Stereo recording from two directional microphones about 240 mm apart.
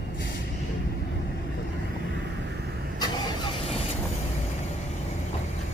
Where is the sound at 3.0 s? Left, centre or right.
Centre.